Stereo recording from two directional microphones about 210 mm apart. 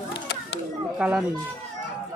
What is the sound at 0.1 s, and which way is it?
Children playing, 55° left (ahead or behind).